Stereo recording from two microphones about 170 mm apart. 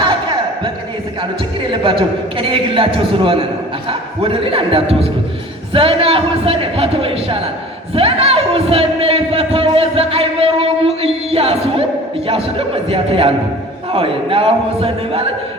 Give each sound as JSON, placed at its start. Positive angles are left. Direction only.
{"t": 1.7, "sound": "speech", "side_deg": -30}